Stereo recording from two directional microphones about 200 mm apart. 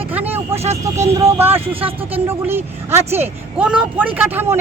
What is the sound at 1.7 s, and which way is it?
Speech, 25° right (ahead or behind).